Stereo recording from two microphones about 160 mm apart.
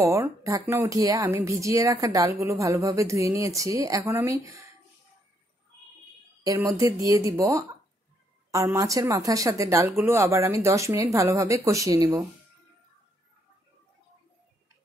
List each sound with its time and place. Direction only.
0.0 s speech: 20° right (ahead or behind)
6.7 s speech: 20° right (ahead or behind)